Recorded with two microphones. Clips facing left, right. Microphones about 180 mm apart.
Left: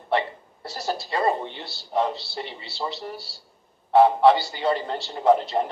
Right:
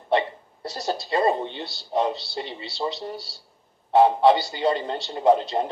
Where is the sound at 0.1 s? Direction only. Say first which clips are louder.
Right 2 dB; 20° right (ahead or behind).